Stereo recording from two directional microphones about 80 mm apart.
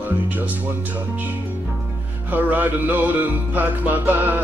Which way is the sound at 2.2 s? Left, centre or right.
Right.